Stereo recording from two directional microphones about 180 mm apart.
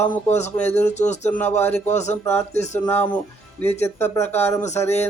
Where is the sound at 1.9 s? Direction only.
40° left (ahead or behind).